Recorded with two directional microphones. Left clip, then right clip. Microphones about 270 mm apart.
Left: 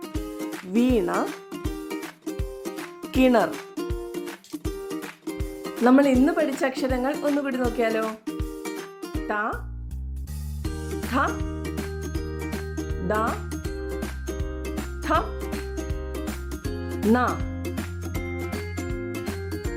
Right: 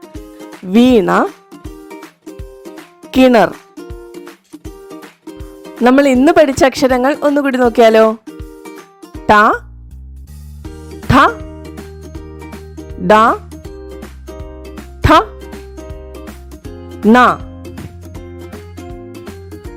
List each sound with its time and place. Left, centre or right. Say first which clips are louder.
0.7 s a woman's voice: right 13 dB; right
1.6 s music: right 1 dB; centre
3.1 s speech: right 11 dB; right
4.6 s music: even; centre
5.8 s a woman's voice: right 10 dB; right
11.1 s music: right 16 dB; right
12.4 s music: right 1 dB; right
13.1 s a woman's voice: right 17 dB; right
14.6 s music: right 10 dB; right
17.1 s speech: right 15 dB; right